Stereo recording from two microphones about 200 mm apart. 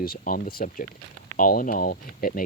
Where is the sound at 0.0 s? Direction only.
45° left (ahead or behind).